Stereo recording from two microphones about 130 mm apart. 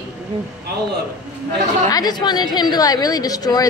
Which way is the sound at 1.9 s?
30° left (ahead or behind).